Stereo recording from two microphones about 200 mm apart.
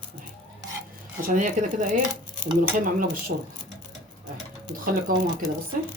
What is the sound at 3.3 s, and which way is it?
Speech, 55° right (ahead or behind).